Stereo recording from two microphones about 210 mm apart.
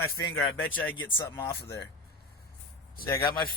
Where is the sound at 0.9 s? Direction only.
65° left (ahead or behind).